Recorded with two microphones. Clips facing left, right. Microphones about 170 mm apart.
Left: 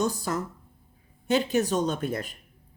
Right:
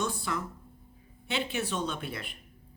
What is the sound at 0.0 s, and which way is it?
Speech, 40° left (ahead or behind).